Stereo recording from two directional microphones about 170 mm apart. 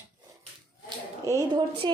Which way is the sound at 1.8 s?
25° right (ahead or behind).